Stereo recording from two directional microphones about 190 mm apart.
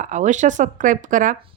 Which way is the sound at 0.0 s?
40° right (ahead or behind).